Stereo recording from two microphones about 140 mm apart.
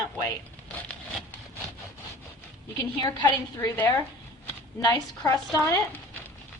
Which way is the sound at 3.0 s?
30° left (ahead or behind).